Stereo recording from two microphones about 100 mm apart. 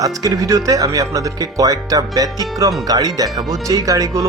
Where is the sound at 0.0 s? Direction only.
35° right (ahead or behind).